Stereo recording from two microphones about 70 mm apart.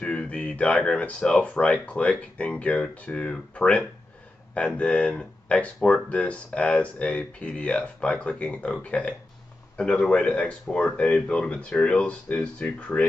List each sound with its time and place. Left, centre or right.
0.0 s speech: centre